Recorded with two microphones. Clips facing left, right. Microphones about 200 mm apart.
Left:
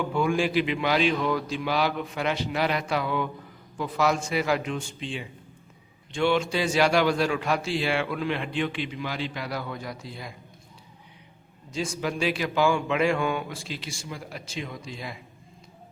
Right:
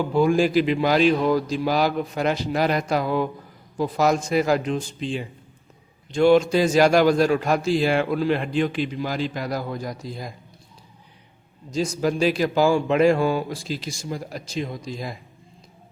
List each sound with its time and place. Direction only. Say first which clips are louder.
0.0 s a man's voice: right 6 dB; 35° right (ahead or behind)
11.7 s a man's voice: right 6 dB; 40° right (ahead or behind)